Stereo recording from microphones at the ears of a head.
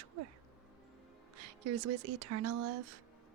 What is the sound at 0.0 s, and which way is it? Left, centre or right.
Music, right.